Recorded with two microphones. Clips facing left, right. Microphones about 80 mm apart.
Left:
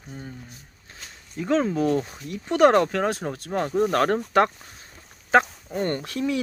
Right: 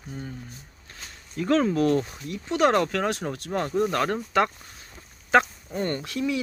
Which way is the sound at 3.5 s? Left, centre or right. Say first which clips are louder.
Left 2 dB; centre.